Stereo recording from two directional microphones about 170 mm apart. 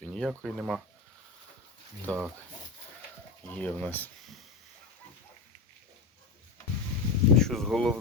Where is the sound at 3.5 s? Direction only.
10° left (ahead or behind).